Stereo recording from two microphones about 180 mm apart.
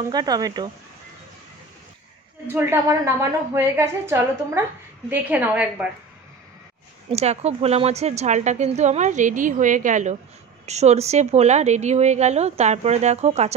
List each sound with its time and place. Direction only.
0.1 s speech: 20° right (ahead or behind)
2.4 s a woman's voice: 15° right (ahead or behind)
7.1 s a woman's voice: 35° right (ahead or behind)